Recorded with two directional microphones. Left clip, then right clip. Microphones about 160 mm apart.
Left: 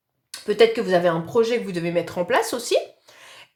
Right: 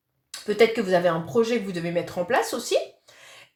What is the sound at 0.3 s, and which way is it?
Speech, 30° left (ahead or behind).